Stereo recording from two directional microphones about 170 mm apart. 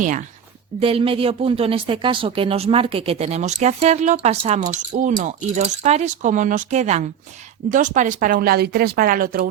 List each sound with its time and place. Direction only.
0.8 s speech: 35° right (ahead or behind); by 9.5 s 55° right (ahead or behind)